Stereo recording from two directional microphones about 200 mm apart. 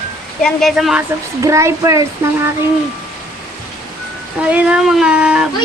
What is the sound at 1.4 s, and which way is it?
Speech, 15° right (ahead or behind).